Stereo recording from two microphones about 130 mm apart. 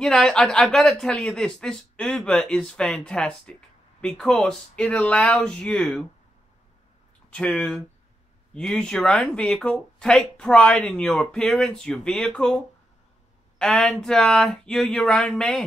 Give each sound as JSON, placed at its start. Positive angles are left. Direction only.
{"t": 0.0, "sound": "speech", "side_deg": 5}
{"t": 7.3, "sound": "speech", "side_deg": 10}